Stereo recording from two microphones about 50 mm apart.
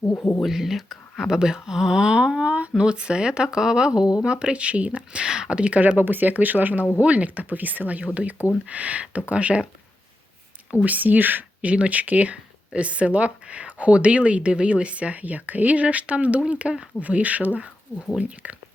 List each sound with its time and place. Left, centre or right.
0.2 s speech: left
0.4 s speech: centre; by 9.6 s right
10.8 s speech: right